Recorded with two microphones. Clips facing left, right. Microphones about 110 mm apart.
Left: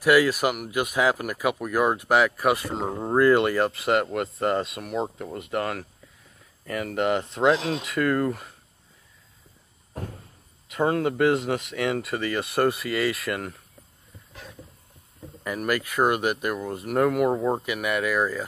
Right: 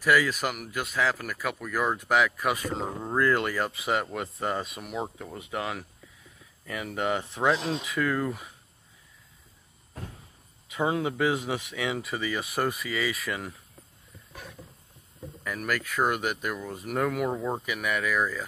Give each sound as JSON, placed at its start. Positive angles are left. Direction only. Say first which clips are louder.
{"t": 0.0, "sound": "speech", "louder": "left 5 dB", "side_deg": 10}
{"t": 10.8, "sound": "speech", "louder": "left 4 dB", "side_deg": -10}
{"t": 15.4, "sound": "speech", "louder": "left 5 dB", "side_deg": 10}
{"t": 17.3, "sound": "speech", "louder": "left 6 dB", "side_deg": 20}
{"t": 17.6, "sound": "speech", "louder": "left 3 dB", "side_deg": 5}